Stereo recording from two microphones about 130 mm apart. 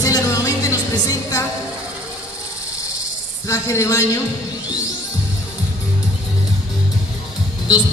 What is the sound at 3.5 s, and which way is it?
Speech, 25° left (ahead or behind).